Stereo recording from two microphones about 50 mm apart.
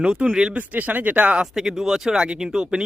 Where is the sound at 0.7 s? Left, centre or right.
Right.